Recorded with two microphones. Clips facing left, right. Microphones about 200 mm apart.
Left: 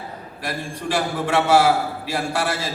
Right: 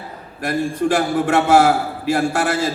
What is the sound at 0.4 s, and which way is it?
A man's voice, 50° right (ahead or behind).